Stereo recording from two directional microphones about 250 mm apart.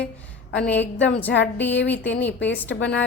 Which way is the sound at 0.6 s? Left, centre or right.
Centre.